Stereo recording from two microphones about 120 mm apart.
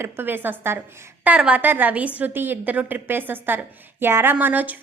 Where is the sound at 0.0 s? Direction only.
15° right (ahead or behind).